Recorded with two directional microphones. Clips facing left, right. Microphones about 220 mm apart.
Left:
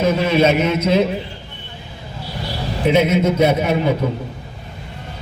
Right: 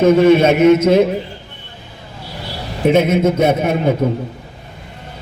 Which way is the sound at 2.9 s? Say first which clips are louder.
Right 2 dB; 50° right (ahead or behind).